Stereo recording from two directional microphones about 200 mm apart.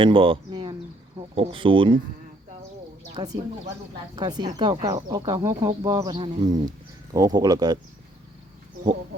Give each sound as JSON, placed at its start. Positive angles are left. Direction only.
{"t": 0.0, "sound": "speech", "side_deg": -25}
{"t": 4.1, "sound": "speech", "side_deg": -20}